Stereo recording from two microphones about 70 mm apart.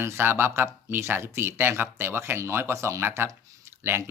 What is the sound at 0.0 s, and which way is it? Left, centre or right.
Speech, right.